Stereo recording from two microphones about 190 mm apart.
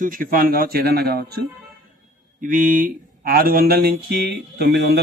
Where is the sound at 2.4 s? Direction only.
45° right (ahead or behind).